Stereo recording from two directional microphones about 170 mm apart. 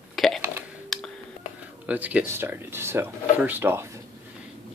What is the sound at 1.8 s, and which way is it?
Speech, 10° right (ahead or behind).